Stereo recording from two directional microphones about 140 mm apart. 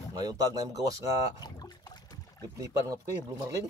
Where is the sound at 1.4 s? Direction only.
30° left (ahead or behind).